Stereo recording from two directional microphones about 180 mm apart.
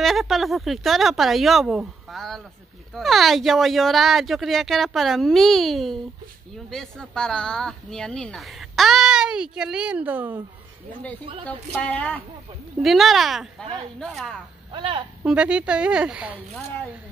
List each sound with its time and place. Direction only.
0.0 s speech: centre (ahead or behind)
11.4 s a woman's voice: 5° left (ahead or behind)
14.7 s speech: 25° right (ahead or behind)
15.2 s speech: 5° right (ahead or behind)